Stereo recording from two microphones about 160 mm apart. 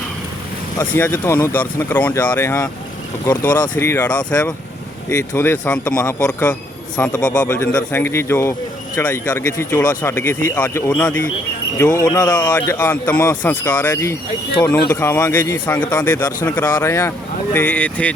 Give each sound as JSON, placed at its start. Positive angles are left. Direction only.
{"t": 0.8, "sound": "speech", "side_deg": 15}
{"t": 12.5, "sound": "speech", "side_deg": 10}